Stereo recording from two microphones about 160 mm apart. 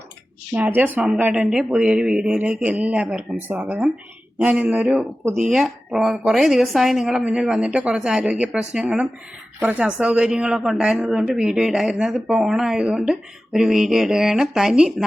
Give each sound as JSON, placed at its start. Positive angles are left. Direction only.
{"t": 0.5, "sound": "speech", "side_deg": -10}